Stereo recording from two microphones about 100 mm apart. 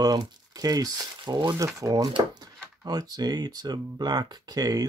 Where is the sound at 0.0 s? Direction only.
40° right (ahead or behind).